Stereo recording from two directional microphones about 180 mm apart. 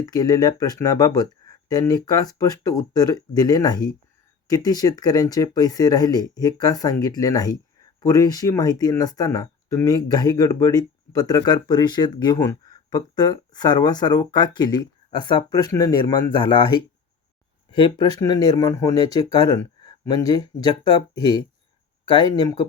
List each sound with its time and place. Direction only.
0.0 s speech: 20° left (ahead or behind)